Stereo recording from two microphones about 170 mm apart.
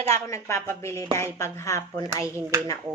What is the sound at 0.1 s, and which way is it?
Speech, 15° left (ahead or behind).